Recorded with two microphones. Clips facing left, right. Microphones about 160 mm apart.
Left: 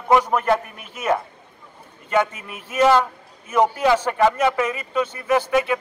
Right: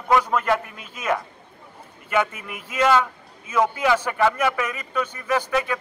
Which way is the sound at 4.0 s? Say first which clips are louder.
Left 3 dB; 15° left (ahead or behind).